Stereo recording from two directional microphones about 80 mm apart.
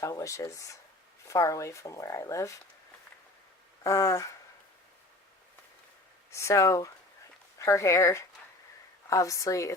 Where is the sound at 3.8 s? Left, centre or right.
Left.